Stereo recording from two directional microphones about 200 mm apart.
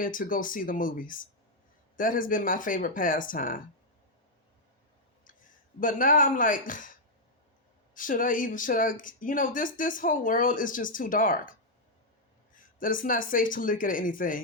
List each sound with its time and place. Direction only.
0.0 s speech: 45° left (ahead or behind)
5.8 s speech: 45° left (ahead or behind)
12.5 s speech: 45° left (ahead or behind)